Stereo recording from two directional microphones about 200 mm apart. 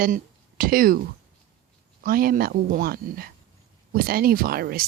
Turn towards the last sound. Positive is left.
turn(degrees=-50)  # may be behind; listen again after turning